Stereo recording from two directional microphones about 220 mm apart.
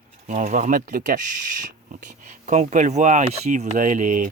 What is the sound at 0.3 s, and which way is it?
Speech, 30° right (ahead or behind).